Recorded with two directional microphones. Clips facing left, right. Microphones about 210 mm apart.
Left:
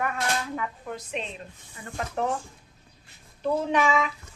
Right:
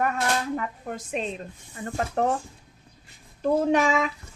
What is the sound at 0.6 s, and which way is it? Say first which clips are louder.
A woman's voice: right 2 dB; 45° right (ahead or behind).